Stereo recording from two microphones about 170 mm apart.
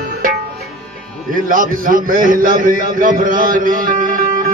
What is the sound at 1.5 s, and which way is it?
A man's voice, 55° right (ahead or behind).